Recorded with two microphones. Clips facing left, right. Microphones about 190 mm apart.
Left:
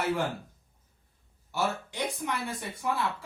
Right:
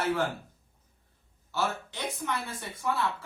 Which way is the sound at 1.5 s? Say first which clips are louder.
Left 1 dB; 15° left (ahead or behind).